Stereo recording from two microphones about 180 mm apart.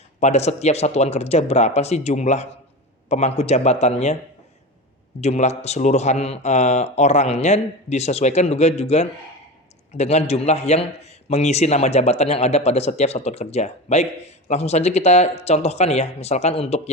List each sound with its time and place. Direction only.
0.2 s a man's voice: 40° left (ahead or behind)
5.2 s a man's voice: 40° left (ahead or behind)